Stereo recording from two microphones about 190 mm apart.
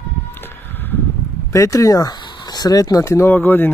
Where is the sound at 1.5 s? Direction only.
15° left (ahead or behind).